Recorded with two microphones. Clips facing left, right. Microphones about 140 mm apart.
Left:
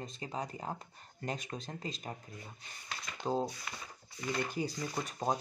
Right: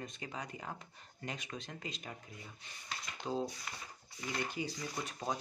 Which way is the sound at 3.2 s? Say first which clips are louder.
Left 4 dB; 25° left (ahead or behind).